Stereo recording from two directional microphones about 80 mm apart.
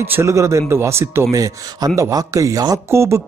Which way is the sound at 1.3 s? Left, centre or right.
Right.